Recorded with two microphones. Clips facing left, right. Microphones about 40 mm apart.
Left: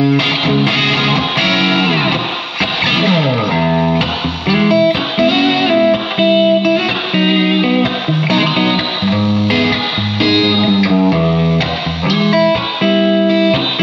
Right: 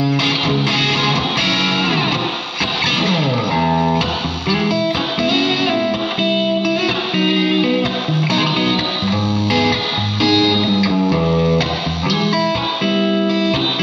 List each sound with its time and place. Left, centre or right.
0.0 s music: left